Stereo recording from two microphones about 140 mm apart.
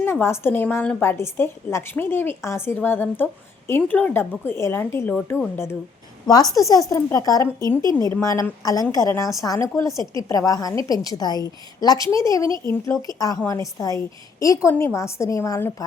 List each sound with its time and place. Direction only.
0.0 s a woman's voice: 15° left (ahead or behind)
6.5 s a woman's voice: 25° left (ahead or behind)
12.5 s speech: 35° right (ahead or behind)
13.1 s a woman's voice: 25° left (ahead or behind)